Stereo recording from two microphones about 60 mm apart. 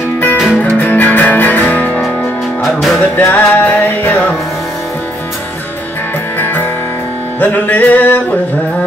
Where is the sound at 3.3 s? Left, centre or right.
Left.